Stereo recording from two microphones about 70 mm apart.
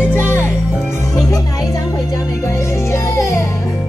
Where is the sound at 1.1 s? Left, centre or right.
Left.